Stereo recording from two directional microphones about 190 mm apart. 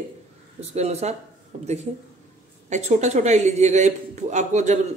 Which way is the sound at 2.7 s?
40° right (ahead or behind).